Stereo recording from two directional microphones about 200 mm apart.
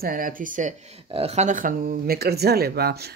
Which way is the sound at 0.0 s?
45° right (ahead or behind).